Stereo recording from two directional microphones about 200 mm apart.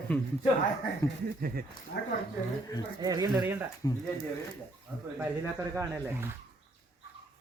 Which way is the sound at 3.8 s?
20° left (ahead or behind).